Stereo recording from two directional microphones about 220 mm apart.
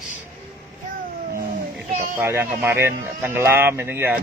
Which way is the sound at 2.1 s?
10° right (ahead or behind).